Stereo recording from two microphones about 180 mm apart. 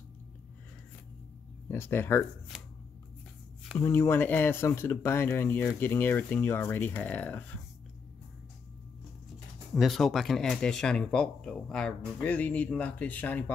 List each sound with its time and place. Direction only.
1.7 s speech: 10° left (ahead or behind)
3.7 s speech: 15° left (ahead or behind)
9.8 s speech: centre (ahead or behind)